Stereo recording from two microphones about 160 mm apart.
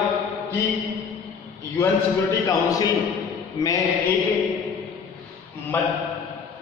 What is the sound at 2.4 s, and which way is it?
A man's voice, 20° left (ahead or behind).